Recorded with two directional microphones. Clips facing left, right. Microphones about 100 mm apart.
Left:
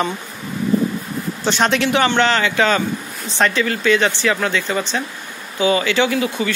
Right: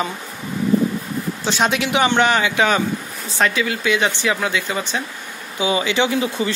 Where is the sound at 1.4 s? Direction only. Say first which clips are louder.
Left 3 dB; 5° right (ahead or behind).